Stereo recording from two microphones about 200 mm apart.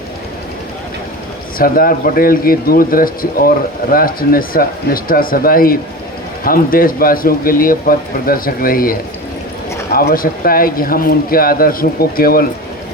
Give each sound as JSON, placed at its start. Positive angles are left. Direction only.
{"t": 1.5, "sound": "a man's voice", "side_deg": 45}